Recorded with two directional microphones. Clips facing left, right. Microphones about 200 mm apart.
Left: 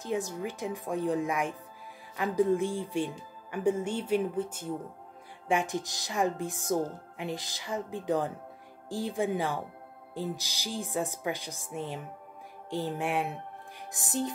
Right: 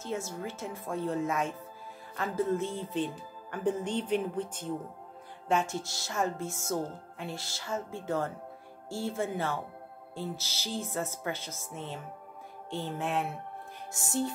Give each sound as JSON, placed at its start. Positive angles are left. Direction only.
{"t": 0.0, "sound": "speech", "side_deg": 15}